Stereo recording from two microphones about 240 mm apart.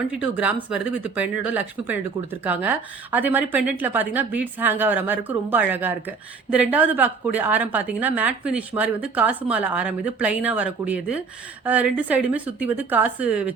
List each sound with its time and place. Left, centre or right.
0.1 s a woman's voice: centre